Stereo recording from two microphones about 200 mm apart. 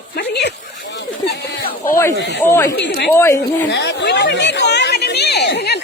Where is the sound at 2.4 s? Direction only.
15° left (ahead or behind).